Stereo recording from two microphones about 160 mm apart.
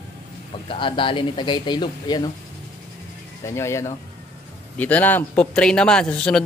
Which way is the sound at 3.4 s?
15° left (ahead or behind).